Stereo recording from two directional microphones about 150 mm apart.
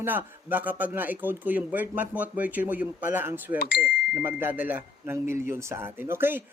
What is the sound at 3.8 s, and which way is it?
Speech, 10° right (ahead or behind).